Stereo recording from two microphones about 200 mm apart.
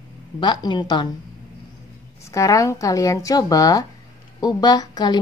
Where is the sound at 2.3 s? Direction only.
15° left (ahead or behind).